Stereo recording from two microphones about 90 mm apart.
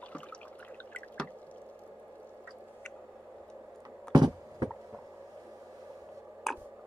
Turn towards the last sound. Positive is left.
turn(degrees=0)  # may be behind; listen again after turning